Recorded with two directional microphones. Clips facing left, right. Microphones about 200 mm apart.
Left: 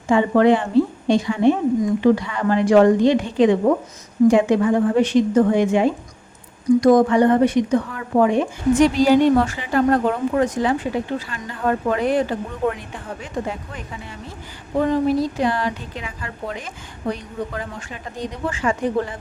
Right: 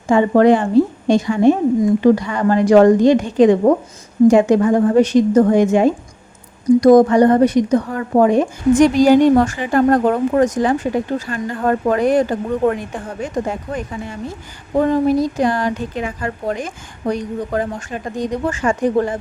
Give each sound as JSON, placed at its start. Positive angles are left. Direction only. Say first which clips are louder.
{"t": 0.1, "sound": "a woman's voice", "louder": "right 3 dB", "side_deg": -45}